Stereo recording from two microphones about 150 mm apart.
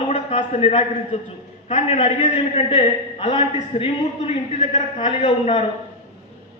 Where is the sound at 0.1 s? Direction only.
45° left (ahead or behind).